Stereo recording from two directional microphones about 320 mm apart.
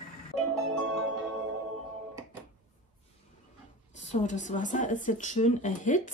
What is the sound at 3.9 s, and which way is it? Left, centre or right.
Speech, left.